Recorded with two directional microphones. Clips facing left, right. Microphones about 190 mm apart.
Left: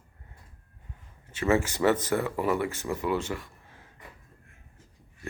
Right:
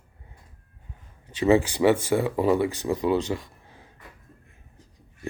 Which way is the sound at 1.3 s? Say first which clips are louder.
Right 5 dB; 15° right (ahead or behind).